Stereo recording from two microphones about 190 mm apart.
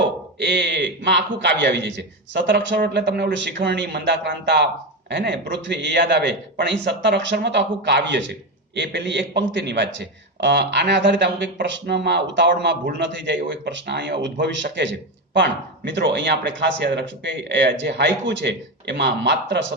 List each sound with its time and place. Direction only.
0.3 s a man's voice: 65° right (ahead or behind)